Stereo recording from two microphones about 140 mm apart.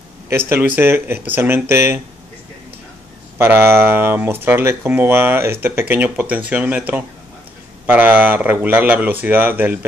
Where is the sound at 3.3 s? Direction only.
15° right (ahead or behind).